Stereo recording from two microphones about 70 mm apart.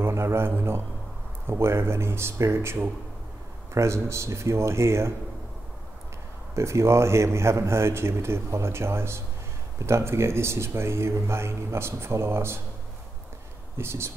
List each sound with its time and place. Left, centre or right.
0.0 s a man's voice: right
6.5 s a man's voice: right
13.7 s a man's voice: right